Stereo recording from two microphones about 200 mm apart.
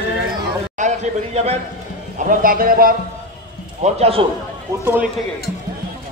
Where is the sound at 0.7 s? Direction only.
35° right (ahead or behind).